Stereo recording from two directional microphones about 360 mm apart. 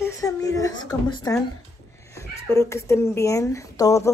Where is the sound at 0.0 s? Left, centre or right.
Centre.